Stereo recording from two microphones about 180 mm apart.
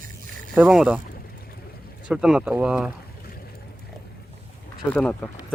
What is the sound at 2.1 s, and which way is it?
Speech, 5° right (ahead or behind).